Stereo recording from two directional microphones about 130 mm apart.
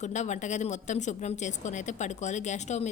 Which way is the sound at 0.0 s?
65° left (ahead or behind).